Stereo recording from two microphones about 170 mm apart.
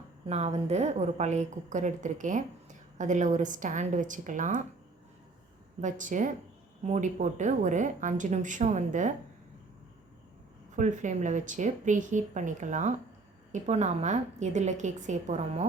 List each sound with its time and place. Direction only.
0.3 s a woman's voice: 40° right (ahead or behind)
5.8 s a woman's voice: 50° right (ahead or behind)
10.8 s a woman's voice: 45° right (ahead or behind)